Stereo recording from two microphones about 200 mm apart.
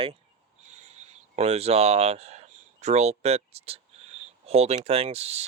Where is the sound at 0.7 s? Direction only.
35° right (ahead or behind).